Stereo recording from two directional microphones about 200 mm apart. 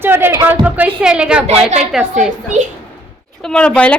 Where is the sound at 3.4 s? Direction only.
5° left (ahead or behind).